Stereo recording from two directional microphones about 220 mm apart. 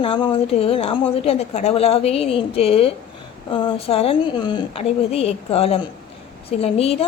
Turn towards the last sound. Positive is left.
turn(degrees=25)  # may be behind; listen again after turning